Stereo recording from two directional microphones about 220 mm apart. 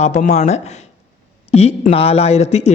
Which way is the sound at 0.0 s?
30° left (ahead or behind).